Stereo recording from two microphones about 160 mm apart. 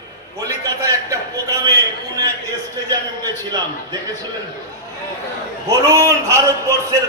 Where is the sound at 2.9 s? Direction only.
25° right (ahead or behind).